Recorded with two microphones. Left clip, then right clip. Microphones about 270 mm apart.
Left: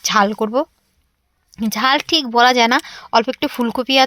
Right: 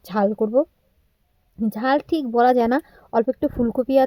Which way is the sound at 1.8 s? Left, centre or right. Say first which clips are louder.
Left 5 dB; centre.